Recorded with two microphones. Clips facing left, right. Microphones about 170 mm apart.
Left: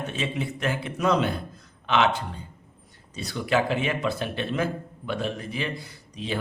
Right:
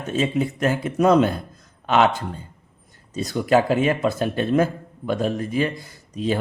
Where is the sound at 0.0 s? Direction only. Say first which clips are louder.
Right 7 dB; 40° right (ahead or behind).